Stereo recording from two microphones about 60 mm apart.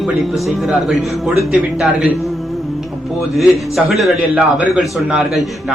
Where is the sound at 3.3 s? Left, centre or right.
Centre.